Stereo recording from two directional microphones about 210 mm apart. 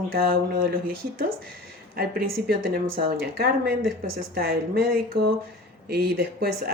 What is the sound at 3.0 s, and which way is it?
A woman's voice, 50° right (ahead or behind).